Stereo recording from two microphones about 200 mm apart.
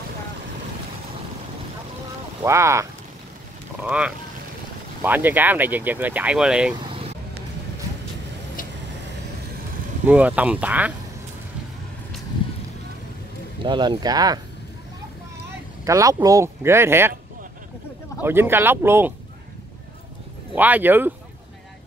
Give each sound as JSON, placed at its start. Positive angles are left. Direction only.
{"t": 2.4, "sound": "speech", "side_deg": -15}
{"t": 6.8, "sound": "vehicle", "side_deg": -30}
{"t": 10.0, "sound": "speech", "side_deg": -5}
{"t": 13.6, "sound": "speech", "side_deg": -25}
{"t": 15.8, "sound": "speech", "side_deg": -15}
{"t": 18.2, "sound": "speech", "side_deg": -10}
{"t": 20.5, "sound": "speech", "side_deg": -10}